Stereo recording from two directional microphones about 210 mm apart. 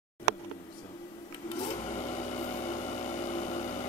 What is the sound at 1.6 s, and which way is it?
Vehicle, 30° left (ahead or behind).